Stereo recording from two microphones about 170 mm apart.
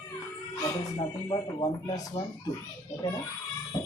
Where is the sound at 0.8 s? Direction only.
25° left (ahead or behind).